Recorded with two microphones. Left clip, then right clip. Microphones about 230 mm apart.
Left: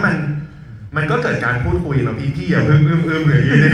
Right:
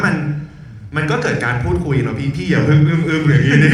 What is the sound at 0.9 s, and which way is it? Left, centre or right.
A man's voice, right.